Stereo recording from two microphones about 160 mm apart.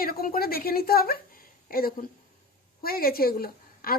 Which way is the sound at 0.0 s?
70° left (ahead or behind).